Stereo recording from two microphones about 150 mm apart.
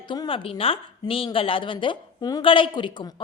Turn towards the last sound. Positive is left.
turn(degrees=30)  # may be behind; listen again after turning